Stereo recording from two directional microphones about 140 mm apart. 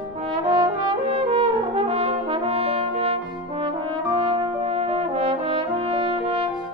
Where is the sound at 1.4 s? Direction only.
45° right (ahead or behind).